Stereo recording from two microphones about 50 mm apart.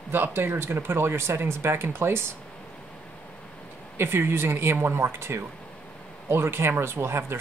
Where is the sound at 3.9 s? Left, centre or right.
Right.